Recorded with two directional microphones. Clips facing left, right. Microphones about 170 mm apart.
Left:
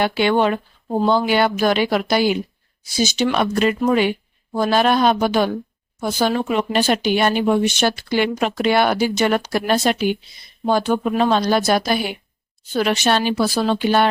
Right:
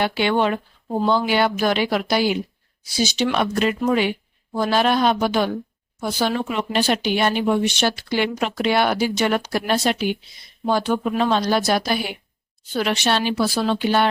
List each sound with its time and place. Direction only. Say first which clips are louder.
0.0 s speech: left 3 dB; 50° left (ahead or behind)